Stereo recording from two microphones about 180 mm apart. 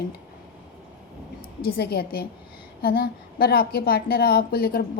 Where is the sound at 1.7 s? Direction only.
60° left (ahead or behind).